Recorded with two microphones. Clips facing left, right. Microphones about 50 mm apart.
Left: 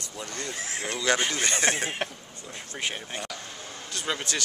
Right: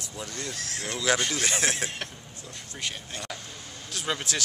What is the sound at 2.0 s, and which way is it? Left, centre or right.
Speech, left.